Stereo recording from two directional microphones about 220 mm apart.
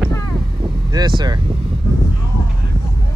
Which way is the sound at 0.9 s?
20° right (ahead or behind).